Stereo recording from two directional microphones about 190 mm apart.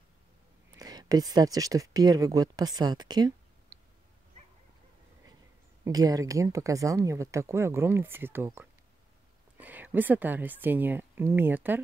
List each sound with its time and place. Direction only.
0.7 s speech: 20° right (ahead or behind)
5.9 s speech: 20° right (ahead or behind)